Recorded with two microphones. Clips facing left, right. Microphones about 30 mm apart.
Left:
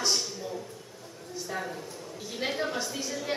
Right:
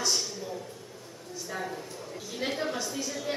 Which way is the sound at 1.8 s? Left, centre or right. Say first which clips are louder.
Right 1 dB; centre.